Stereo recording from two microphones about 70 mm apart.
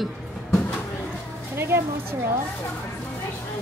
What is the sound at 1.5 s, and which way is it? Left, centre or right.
Speech, right.